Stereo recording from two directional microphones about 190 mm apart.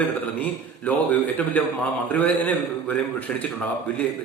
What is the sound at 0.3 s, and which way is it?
A man's voice, 10° left (ahead or behind).